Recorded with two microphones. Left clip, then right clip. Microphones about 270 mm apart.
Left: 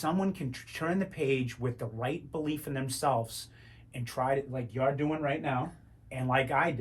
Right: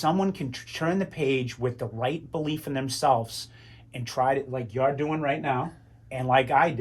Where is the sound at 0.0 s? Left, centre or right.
Right.